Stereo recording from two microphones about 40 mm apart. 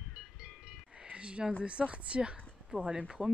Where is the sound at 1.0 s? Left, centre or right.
Right.